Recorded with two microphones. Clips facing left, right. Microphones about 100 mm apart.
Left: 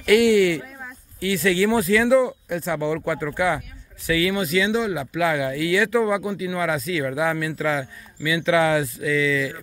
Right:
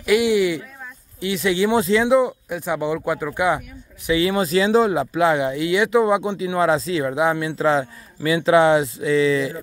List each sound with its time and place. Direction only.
0.0 s speech: 10° right (ahead or behind)
4.1 s speech: 30° right (ahead or behind)